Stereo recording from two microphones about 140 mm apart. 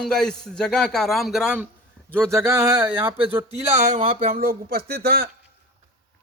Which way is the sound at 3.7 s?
60° right (ahead or behind).